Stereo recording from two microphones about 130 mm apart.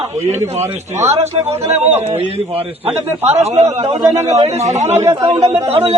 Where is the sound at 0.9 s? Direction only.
60° right (ahead or behind).